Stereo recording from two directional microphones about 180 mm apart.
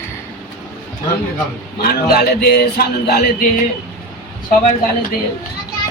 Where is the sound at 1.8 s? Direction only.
55° left (ahead or behind).